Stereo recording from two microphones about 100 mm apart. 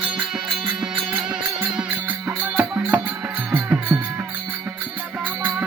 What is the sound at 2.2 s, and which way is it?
Music, 15° right (ahead or behind).